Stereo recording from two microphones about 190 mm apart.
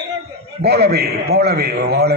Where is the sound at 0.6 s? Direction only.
60° right (ahead or behind).